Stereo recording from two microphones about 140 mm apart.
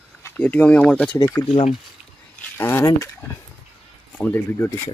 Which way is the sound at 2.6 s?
15° left (ahead or behind).